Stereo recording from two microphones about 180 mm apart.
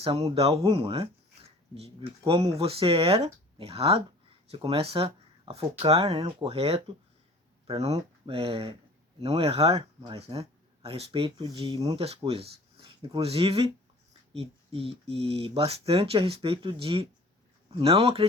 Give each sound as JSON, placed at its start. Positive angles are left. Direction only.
{"t": 0.0, "sound": "speech", "side_deg": -30}